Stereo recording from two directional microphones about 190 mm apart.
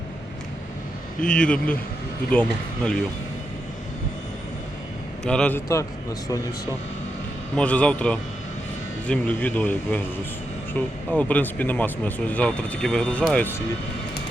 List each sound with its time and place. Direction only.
1.2 s speech: 5° left (ahead or behind)
5.2 s speech: 5° left (ahead or behind)
7.5 s speech: 5° left (ahead or behind)